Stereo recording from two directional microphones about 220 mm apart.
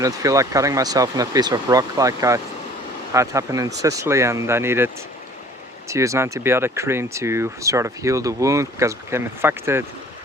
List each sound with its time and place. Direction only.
0.0 s speech: 15° right (ahead or behind)
5.9 s speech: 15° right (ahead or behind)